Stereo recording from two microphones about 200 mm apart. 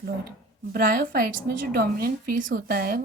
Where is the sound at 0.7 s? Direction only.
45° right (ahead or behind).